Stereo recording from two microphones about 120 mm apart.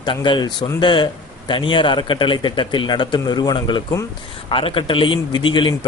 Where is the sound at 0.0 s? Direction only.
40° left (ahead or behind).